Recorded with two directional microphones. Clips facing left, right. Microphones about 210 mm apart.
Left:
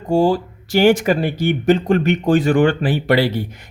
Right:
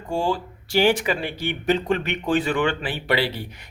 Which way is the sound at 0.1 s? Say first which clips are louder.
Left 9 dB; 40° left (ahead or behind).